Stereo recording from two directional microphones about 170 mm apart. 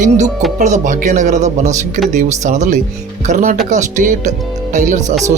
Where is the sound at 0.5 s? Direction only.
45° right (ahead or behind).